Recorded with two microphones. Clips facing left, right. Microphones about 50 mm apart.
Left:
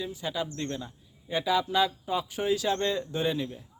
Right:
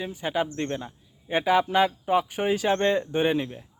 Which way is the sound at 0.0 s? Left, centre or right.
Right.